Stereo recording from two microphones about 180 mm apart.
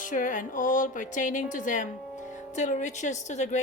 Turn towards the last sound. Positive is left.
turn(degrees=40)  # may be behind; listen again after turning